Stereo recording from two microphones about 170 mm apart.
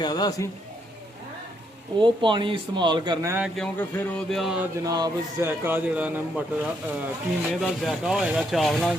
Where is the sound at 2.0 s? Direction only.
30° right (ahead or behind).